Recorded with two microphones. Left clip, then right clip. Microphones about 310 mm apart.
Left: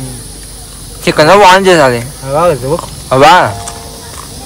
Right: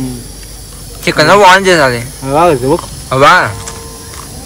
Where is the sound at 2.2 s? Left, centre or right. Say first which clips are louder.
Right 2 dB; right.